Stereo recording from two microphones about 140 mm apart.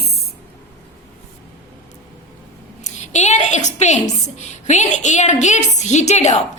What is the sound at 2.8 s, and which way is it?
A woman's voice, 55° left (ahead or behind).